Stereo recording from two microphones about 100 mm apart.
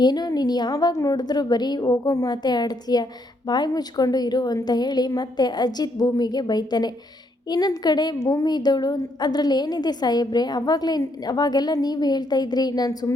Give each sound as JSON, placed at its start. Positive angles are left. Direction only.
{"t": 0.0, "sound": "a woman's voice", "side_deg": 40}